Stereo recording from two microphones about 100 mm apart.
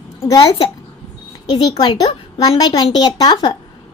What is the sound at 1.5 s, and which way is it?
A woman's voice, 45° left (ahead or behind).